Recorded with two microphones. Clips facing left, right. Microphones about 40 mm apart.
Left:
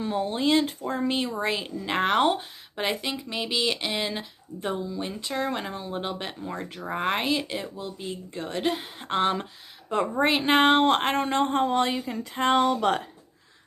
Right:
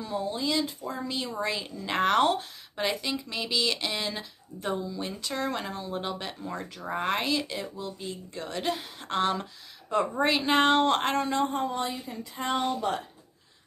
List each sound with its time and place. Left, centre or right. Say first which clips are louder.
0.0 s speech: left 5 dB; left
11.2 s speech: left 4 dB; left